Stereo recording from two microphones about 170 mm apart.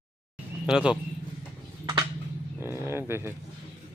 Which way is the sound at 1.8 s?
25° right (ahead or behind).